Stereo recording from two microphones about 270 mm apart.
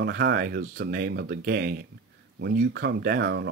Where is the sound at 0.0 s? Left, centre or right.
Right.